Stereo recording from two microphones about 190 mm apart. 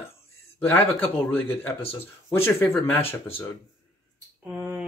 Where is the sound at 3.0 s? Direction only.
30° left (ahead or behind).